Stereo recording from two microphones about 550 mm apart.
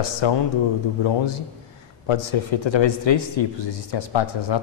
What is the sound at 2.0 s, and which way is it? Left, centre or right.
A man's voice, left.